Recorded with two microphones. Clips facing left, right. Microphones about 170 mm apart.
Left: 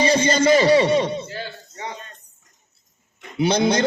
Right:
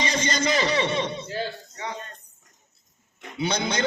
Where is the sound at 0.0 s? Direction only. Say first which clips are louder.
Left 8 dB; 35° left (ahead or behind).